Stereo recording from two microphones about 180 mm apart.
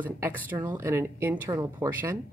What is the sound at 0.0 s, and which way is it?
Speech, 10° right (ahead or behind).